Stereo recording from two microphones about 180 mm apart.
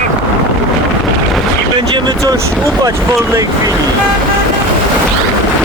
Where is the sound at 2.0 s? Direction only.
25° right (ahead or behind).